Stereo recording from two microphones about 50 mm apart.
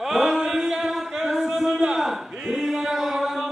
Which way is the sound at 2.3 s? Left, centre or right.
Centre.